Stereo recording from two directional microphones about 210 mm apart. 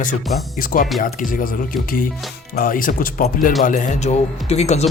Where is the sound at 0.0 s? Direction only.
40° left (ahead or behind).